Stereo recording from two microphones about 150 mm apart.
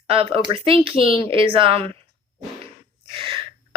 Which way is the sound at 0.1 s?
40° right (ahead or behind).